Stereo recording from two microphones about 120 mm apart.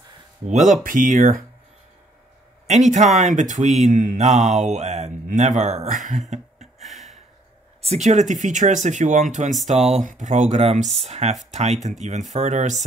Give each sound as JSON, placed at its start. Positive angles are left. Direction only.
{"t": 0.5, "sound": "speech", "side_deg": -90}
{"t": 2.6, "sound": "speech", "side_deg": -75}
{"t": 5.9, "sound": "speech", "side_deg": -90}
{"t": 6.8, "sound": "a sound", "side_deg": 0}
{"t": 7.8, "sound": "speech", "side_deg": -75}
{"t": 9.7, "sound": "speech", "side_deg": -65}